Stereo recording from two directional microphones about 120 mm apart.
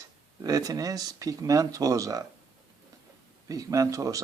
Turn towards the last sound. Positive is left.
turn(degrees=-30)  # may be behind; listen again after turning